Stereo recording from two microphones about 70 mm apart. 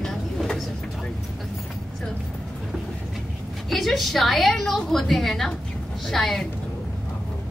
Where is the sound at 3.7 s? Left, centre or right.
Centre.